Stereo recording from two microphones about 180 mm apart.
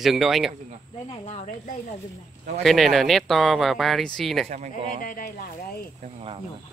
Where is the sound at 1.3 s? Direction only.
40° left (ahead or behind).